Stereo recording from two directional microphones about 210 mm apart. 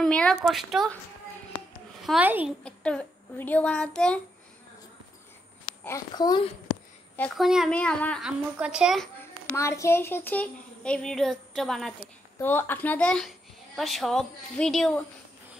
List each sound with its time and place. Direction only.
0.0 s a child's voice: 5° left (ahead or behind)
2.0 s a child's voice: 5° right (ahead or behind)
2.6 s a child's voice: 5° left (ahead or behind)
5.9 s a woman's voice: 15° left (ahead or behind)
7.2 s a child's voice: centre (ahead or behind)
9.6 s a child's voice: 15° left (ahead or behind)